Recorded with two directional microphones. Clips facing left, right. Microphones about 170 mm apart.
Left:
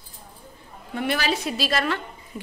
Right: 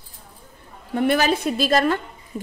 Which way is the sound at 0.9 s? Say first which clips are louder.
Right 6 dB; 45° right (ahead or behind).